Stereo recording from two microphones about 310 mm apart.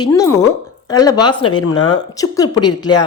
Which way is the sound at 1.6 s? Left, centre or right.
Left.